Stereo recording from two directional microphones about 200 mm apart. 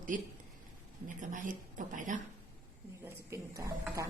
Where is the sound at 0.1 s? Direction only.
40° right (ahead or behind).